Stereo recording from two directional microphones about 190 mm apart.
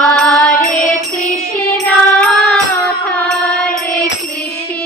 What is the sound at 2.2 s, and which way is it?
Music, centre (ahead or behind).